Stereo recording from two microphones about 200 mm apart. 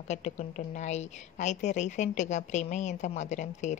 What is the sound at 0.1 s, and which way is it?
A woman's voice, 35° left (ahead or behind).